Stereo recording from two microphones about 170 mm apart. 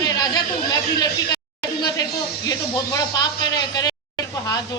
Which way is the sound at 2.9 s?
25° left (ahead or behind).